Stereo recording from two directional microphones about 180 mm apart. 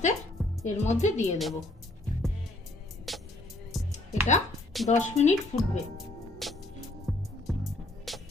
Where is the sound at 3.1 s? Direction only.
Centre (ahead or behind).